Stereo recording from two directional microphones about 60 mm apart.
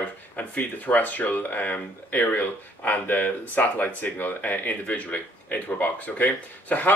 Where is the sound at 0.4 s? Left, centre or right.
Left.